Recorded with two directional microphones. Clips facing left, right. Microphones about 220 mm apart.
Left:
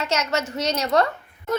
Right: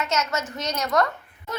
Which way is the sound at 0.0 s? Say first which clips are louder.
Left 2 dB; 30° left (ahead or behind).